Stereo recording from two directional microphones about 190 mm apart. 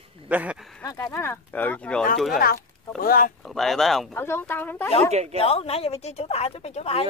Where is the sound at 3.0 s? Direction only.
50° left (ahead or behind).